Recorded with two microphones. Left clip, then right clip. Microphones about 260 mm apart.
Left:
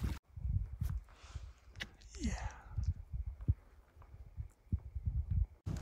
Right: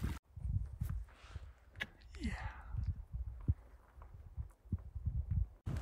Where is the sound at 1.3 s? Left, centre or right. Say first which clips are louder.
Left 1 dB; centre.